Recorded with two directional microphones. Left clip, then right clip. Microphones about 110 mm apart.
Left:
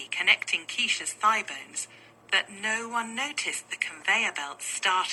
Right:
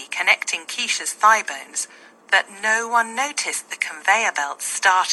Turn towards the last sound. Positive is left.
turn(degrees=-50)  # may be behind; listen again after turning